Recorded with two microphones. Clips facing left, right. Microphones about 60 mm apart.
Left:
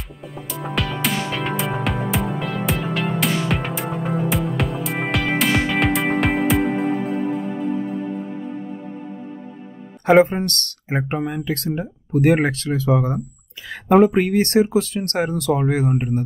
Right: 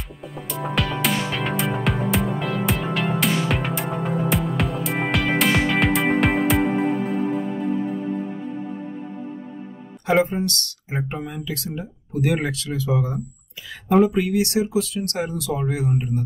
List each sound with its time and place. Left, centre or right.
0.2 s music: centre
10.2 s speech: left